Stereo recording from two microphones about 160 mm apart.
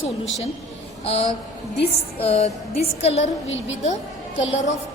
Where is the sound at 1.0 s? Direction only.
40° left (ahead or behind).